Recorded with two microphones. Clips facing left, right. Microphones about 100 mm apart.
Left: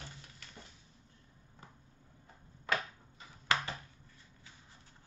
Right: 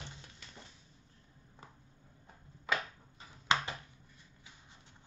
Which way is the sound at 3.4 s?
20° right (ahead or behind).